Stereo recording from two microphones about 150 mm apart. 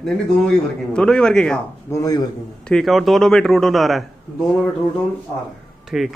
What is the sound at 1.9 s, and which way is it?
Speech, 20° left (ahead or behind).